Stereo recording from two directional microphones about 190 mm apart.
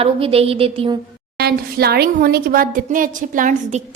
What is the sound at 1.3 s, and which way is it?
A woman's voice, 55° right (ahead or behind).